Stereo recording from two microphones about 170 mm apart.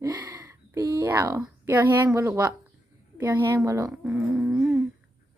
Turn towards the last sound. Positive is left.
turn(degrees=-5)  # may be behind; listen again after turning